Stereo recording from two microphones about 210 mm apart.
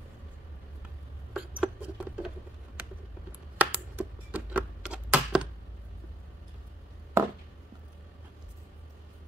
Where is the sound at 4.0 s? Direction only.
10° right (ahead or behind).